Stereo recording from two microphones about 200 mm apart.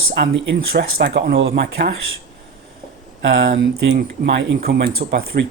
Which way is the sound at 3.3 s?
55° right (ahead or behind).